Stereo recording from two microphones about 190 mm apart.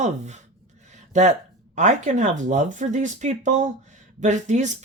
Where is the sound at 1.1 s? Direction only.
40° right (ahead or behind).